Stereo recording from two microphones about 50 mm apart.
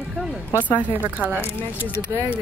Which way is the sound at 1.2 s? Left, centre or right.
Right.